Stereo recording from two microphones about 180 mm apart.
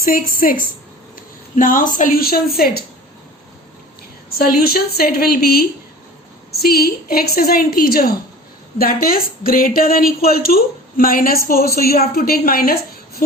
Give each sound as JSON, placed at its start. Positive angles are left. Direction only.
{"t": 0.0, "sound": "a woman's voice", "side_deg": 50}
{"t": 4.4, "sound": "a woman's voice", "side_deg": 55}